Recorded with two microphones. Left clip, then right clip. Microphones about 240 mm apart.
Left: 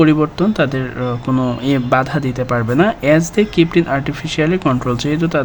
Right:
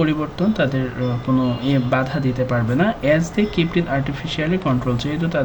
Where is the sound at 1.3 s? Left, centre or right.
Left.